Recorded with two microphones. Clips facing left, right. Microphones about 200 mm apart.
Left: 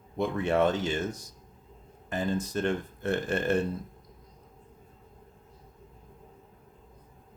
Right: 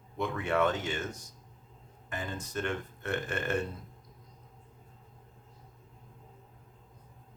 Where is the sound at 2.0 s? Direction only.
35° left (ahead or behind).